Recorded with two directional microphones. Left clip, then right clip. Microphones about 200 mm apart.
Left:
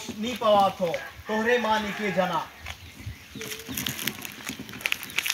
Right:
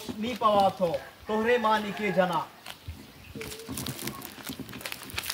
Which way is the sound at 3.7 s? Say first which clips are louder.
Left 8 dB; 30° right (ahead or behind).